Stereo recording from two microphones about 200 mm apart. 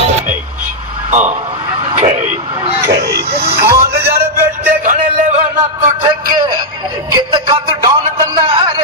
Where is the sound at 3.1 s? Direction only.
50° right (ahead or behind).